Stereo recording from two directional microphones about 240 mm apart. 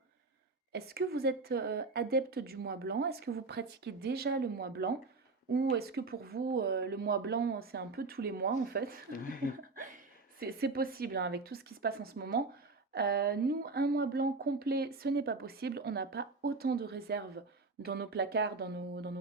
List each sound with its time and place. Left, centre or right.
0.7 s speech: right
10.4 s speech: right